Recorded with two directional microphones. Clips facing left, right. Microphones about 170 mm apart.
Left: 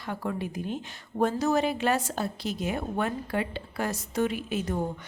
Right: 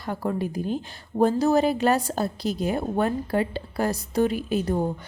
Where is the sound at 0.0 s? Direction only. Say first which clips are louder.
Right 5 dB; 40° right (ahead or behind).